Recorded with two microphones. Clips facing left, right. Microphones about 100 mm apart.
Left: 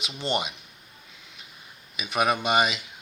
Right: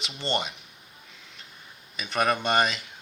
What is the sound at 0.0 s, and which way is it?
Speech, 15° left (ahead or behind).